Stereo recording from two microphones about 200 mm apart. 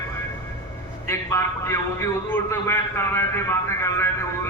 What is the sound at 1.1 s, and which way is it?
A man's voice, 15° left (ahead or behind).